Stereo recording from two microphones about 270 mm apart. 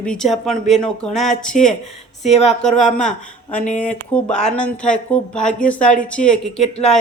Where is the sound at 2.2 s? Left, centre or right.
Left.